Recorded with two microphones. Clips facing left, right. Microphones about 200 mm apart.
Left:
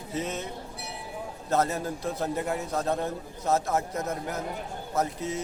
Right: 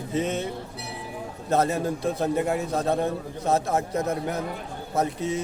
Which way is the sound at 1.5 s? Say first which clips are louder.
Right 4 dB; 25° right (ahead or behind).